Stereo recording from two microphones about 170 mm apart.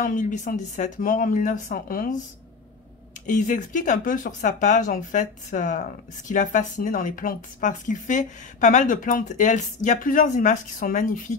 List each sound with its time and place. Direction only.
0.0 s speech: 50° left (ahead or behind)
3.3 s speech: 50° left (ahead or behind)